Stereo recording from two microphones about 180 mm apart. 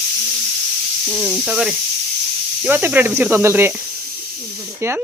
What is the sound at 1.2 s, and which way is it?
A woman's voice, 5° right (ahead or behind).